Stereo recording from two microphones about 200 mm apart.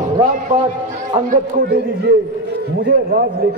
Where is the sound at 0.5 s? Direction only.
35° right (ahead or behind).